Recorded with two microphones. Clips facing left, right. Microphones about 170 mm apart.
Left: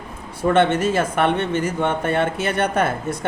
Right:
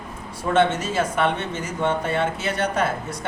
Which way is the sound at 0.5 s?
55° left (ahead or behind).